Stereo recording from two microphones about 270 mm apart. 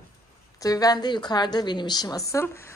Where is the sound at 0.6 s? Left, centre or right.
Centre.